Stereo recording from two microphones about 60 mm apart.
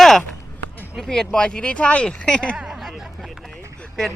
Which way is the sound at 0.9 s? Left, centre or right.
Centre.